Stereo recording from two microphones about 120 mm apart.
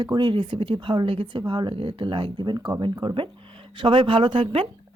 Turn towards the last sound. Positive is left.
turn(degrees=-45)  # may be behind; listen again after turning